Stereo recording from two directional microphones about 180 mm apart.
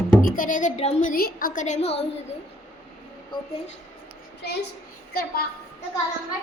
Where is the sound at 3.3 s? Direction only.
25° left (ahead or behind).